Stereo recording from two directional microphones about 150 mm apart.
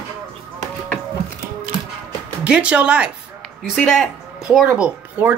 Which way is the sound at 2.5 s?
10° right (ahead or behind).